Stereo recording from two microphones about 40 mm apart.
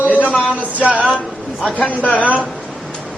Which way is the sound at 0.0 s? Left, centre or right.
Right.